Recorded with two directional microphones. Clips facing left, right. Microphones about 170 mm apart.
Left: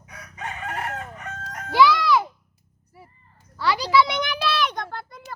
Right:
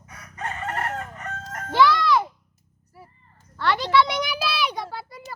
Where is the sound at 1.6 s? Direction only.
5° left (ahead or behind).